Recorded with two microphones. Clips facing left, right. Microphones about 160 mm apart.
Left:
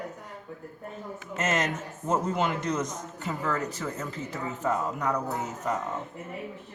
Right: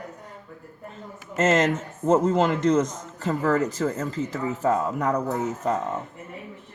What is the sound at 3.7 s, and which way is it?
Speech, 45° right (ahead or behind).